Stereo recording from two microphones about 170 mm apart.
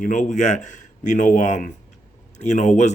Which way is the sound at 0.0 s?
50° left (ahead or behind).